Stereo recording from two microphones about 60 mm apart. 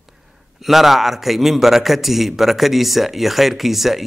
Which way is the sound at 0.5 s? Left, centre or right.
Centre.